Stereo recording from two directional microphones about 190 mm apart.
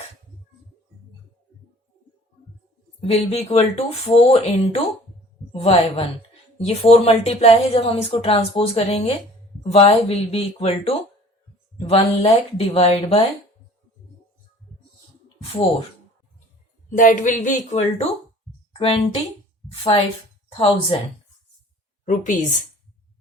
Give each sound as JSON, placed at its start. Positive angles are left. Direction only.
{"t": 3.1, "sound": "a woman's voice", "side_deg": 35}
{"t": 16.9, "sound": "music", "side_deg": 45}
{"t": 17.7, "sound": "a woman's voice", "side_deg": 35}
{"t": 20.5, "sound": "a woman's voice", "side_deg": 30}
{"t": 22.0, "sound": "a woman's voice", "side_deg": 45}